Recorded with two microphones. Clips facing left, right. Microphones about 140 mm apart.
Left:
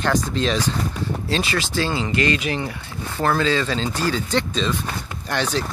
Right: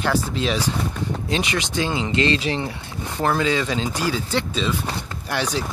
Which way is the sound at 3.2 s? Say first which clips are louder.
Left 1 dB; 15° right (ahead or behind).